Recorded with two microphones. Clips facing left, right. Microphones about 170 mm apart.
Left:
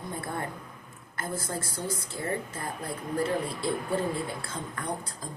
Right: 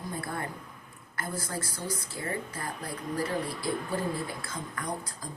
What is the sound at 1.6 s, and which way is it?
Speech, 50° left (ahead or behind).